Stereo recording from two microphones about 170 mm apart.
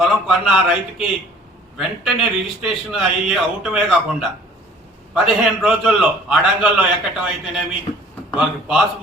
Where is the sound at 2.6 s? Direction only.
Centre (ahead or behind).